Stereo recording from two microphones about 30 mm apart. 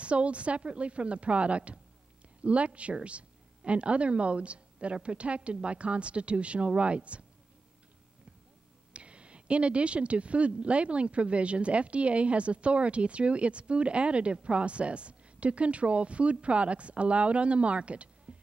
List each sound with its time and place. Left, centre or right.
0.0 s speech: right
8.9 s speech: right